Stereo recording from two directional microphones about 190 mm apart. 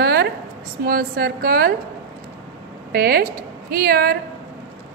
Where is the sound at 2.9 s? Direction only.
50° right (ahead or behind).